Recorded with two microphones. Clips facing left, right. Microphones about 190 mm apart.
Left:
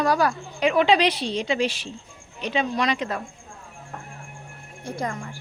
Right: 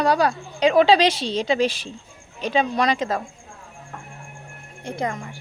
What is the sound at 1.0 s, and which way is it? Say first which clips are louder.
Speech: right 2 dB; 90° right.